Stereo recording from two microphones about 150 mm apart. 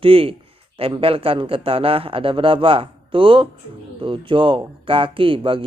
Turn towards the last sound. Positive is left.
turn(degrees=-35)  # may be behind; listen again after turning